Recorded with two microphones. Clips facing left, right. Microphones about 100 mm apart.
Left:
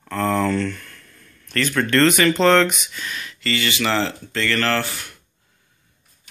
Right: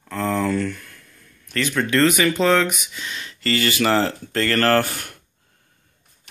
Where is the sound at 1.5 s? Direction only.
15° right (ahead or behind).